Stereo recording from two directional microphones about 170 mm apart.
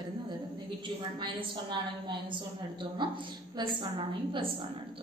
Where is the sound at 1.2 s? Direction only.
25° right (ahead or behind).